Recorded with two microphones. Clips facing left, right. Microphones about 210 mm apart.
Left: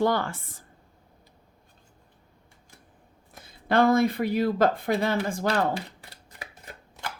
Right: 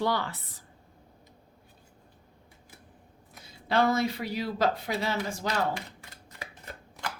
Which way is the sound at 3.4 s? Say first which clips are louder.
Left 4 dB; 50° left (ahead or behind).